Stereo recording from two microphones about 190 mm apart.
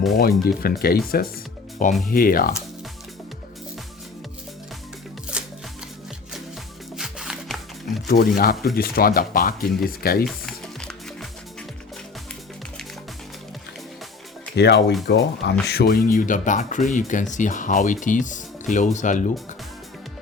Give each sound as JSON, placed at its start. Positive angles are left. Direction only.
{"t": 0.2, "sound": "speech", "side_deg": 50}
{"t": 5.3, "sound": "music", "side_deg": -5}
{"t": 6.9, "sound": "music", "side_deg": -5}
{"t": 8.0, "sound": "speech", "side_deg": 50}
{"t": 10.2, "sound": "music", "side_deg": 5}
{"t": 14.5, "sound": "speech", "side_deg": 60}